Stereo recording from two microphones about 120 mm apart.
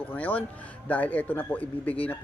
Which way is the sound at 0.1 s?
15° left (ahead or behind).